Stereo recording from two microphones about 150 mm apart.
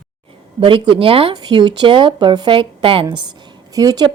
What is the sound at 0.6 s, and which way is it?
Speech, 35° right (ahead or behind).